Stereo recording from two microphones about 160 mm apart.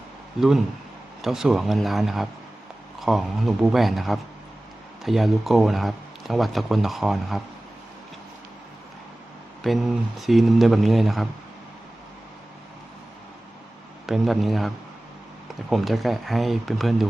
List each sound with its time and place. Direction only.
0.3 s speech: centre (ahead or behind)
9.6 s speech: centre (ahead or behind)
14.1 s speech: centre (ahead or behind)
15.7 s speech: centre (ahead or behind)